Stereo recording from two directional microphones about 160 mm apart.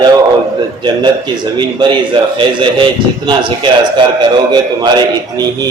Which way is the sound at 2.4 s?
30° right (ahead or behind).